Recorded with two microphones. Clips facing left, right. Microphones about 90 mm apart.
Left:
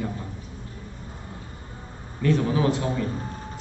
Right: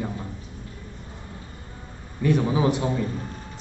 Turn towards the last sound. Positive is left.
turn(degrees=-15)  # may be behind; listen again after turning